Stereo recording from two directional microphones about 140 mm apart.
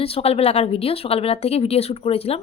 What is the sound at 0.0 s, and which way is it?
Speech, 45° left (ahead or behind).